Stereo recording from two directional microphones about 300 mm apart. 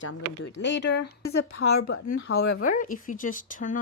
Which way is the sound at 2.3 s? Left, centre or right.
Left.